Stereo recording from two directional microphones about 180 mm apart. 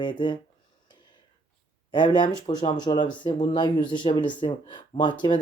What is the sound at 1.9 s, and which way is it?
Speech, 25° left (ahead or behind).